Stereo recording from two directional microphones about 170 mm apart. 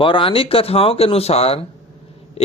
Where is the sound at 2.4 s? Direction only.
40° left (ahead or behind).